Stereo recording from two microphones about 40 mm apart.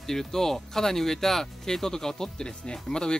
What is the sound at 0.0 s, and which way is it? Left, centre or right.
Speech, centre.